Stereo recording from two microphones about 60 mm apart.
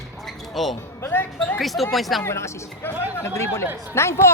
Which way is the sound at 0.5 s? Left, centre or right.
Centre.